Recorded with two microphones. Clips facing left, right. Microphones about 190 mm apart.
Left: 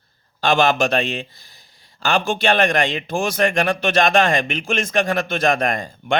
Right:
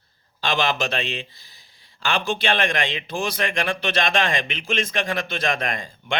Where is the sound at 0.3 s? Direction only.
50° left (ahead or behind).